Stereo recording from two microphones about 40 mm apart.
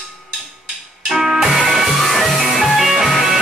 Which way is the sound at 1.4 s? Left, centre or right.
Centre.